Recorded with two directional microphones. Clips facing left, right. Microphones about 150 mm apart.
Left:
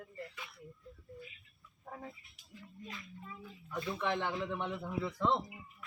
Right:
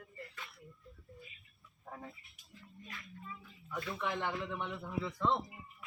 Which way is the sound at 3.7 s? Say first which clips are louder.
Left 2 dB; 20° left (ahead or behind).